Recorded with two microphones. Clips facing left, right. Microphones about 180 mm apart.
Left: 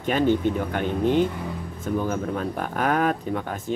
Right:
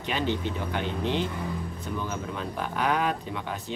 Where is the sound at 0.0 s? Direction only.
50° left (ahead or behind).